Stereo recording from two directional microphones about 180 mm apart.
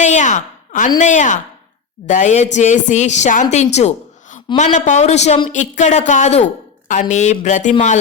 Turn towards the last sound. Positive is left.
turn(degrees=40)  # may be behind; listen again after turning